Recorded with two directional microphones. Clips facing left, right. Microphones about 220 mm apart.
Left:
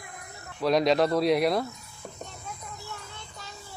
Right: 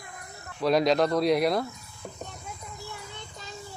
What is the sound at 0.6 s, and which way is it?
Speech, centre (ahead or behind).